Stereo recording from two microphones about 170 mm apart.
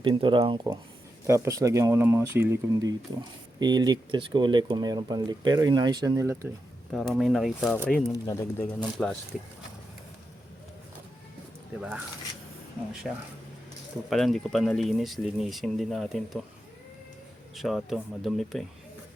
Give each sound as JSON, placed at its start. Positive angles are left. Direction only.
{"t": 0.0, "sound": "speech", "side_deg": -30}
{"t": 1.3, "sound": "speech", "side_deg": -20}
{"t": 3.2, "sound": "speech", "side_deg": -25}
{"t": 6.9, "sound": "speech", "side_deg": 0}
{"t": 11.8, "sound": "speech", "side_deg": -5}
{"t": 14.1, "sound": "speech", "side_deg": 0}
{"t": 17.5, "sound": "speech", "side_deg": 0}